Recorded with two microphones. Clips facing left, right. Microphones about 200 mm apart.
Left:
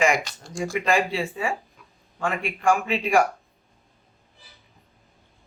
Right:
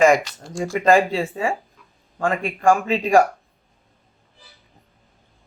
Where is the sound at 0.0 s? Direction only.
45° right (ahead or behind).